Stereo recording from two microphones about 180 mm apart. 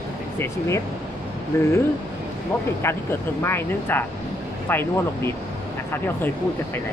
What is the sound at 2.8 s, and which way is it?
Speech, 15° left (ahead or behind).